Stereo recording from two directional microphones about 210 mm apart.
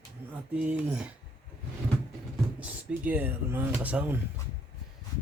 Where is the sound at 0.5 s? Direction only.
10° right (ahead or behind).